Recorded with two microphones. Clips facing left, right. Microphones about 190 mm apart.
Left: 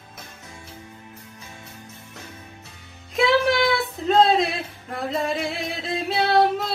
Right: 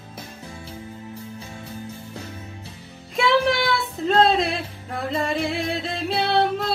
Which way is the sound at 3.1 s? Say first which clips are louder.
Left 1 dB; centre (ahead or behind).